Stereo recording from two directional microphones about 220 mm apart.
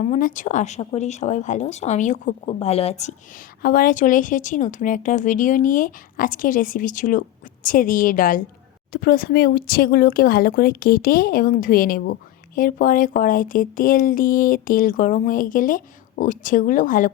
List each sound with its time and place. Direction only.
0.0 s speech: 35° left (ahead or behind)